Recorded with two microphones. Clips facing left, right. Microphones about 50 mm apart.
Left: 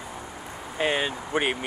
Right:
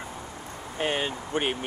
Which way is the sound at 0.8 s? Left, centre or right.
Left.